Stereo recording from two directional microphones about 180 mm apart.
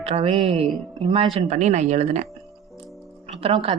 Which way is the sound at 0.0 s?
35° right (ahead or behind).